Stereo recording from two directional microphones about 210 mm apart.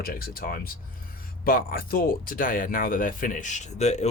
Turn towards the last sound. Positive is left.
turn(degrees=30)  # may be behind; listen again after turning